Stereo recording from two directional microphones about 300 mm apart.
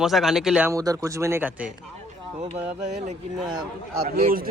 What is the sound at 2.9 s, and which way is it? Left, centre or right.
A man's voice, right.